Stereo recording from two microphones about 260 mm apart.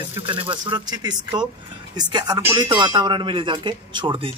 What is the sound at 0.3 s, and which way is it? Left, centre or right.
Speech, centre.